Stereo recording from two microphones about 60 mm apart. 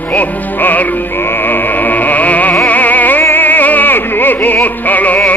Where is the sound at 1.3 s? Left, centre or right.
Left.